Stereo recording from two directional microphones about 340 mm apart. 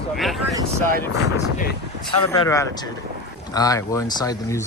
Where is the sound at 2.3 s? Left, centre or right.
Centre.